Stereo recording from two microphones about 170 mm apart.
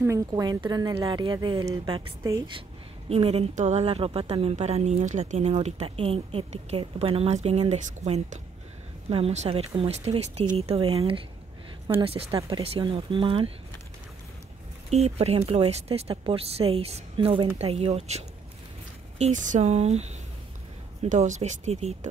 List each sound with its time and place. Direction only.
0.0 s speech: 20° right (ahead or behind)
3.1 s a woman's voice: 35° right (ahead or behind)
14.9 s a woman's voice: 40° right (ahead or behind)